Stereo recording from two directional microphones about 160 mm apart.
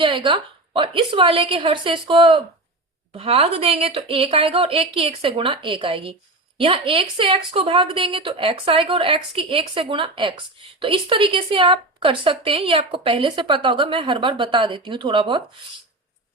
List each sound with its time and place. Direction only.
0.0 s speech: 30° right (ahead or behind)